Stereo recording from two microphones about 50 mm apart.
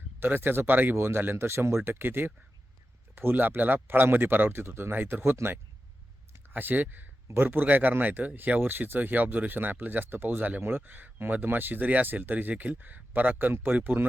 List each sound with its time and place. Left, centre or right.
0.2 s speech: right
0.9 s speech: right
6.3 s speech: right